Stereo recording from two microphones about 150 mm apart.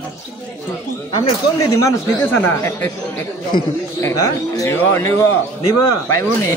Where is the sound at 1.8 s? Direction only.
15° left (ahead or behind).